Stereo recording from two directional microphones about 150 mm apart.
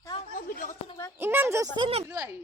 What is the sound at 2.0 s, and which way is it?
Speech, 20° right (ahead or behind).